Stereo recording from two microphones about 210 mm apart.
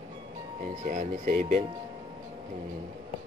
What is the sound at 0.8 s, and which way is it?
Speech, 35° right (ahead or behind).